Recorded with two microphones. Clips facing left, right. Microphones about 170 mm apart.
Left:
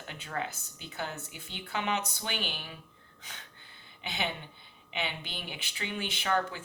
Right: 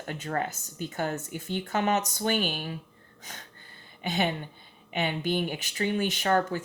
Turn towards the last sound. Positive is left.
turn(degrees=-40)  # may be behind; listen again after turning